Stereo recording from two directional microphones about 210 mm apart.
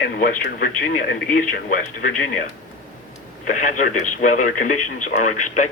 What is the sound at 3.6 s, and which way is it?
Speech, 40° left (ahead or behind).